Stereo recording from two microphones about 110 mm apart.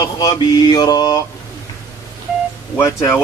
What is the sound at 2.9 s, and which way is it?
Mantra, 25° left (ahead or behind).